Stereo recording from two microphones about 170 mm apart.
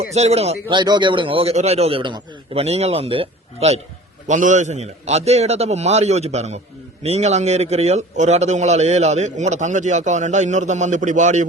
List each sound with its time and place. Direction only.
0.1 s a man's voice: 40° right (ahead or behind)
4.3 s a man's voice: 45° right (ahead or behind)